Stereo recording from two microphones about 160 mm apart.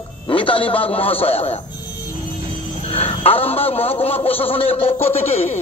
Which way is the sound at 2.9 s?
40° left (ahead or behind).